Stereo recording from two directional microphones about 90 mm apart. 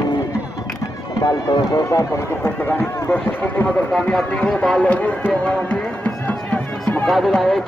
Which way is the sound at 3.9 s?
5° left (ahead or behind).